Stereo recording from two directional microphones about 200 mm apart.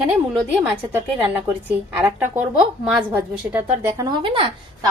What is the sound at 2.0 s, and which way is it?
A woman's voice, 10° right (ahead or behind).